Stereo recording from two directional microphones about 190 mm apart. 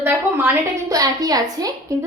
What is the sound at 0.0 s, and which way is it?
A woman's voice, 10° right (ahead or behind).